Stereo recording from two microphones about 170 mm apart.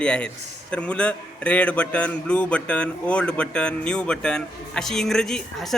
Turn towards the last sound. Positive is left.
turn(degrees=0)  # may be behind; listen again after turning